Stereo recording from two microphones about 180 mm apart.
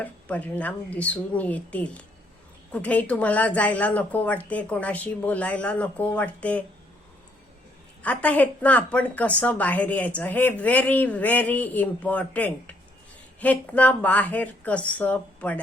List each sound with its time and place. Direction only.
0.0 s a woman's voice: 10° left (ahead or behind)
8.0 s a woman's voice: 10° left (ahead or behind)